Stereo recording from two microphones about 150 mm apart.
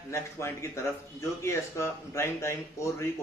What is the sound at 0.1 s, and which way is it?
A man's voice, 15° left (ahead or behind).